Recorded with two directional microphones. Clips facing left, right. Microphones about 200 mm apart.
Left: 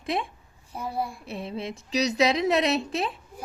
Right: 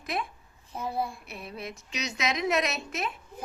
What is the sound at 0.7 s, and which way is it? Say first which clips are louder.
Speech: left 1 dB; 10° left (ahead or behind).